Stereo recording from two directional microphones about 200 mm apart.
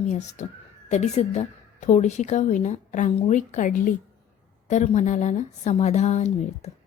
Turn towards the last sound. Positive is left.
turn(degrees=35)  # may be behind; listen again after turning